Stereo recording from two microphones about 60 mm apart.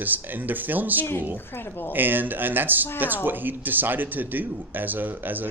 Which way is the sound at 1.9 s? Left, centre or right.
Right.